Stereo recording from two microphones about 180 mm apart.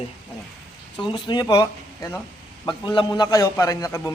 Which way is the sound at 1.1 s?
25° left (ahead or behind).